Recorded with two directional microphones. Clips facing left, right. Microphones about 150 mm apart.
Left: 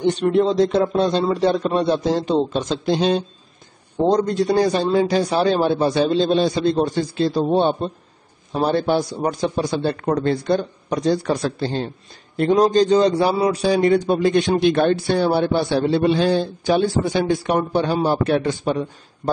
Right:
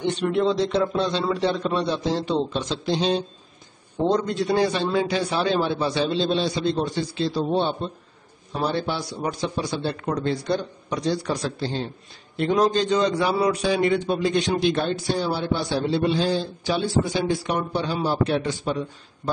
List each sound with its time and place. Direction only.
0.0 s a man's voice: 40° left (ahead or behind)
4.1 s a man's voice: 40° left (ahead or behind)
12.4 s a man's voice: 35° left (ahead or behind); by 19.3 s 55° left (ahead or behind)